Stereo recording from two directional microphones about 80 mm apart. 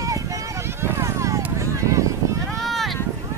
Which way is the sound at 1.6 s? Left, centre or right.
Right.